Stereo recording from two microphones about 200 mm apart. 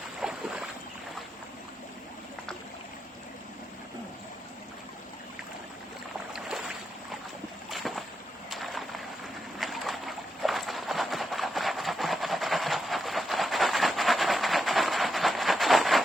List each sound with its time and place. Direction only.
0.2 s boat: 5° right (ahead or behind)
7.7 s boat: centre (ahead or behind)
8.4 s a sound: centre (ahead or behind)
9.6 s clip-clop: centre (ahead or behind)